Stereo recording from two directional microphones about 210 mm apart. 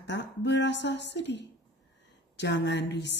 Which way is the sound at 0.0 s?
55° left (ahead or behind).